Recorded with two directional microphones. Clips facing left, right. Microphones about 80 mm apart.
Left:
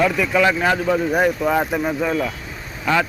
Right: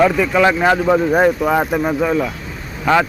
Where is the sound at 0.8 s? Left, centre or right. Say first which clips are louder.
Right 5 dB; right.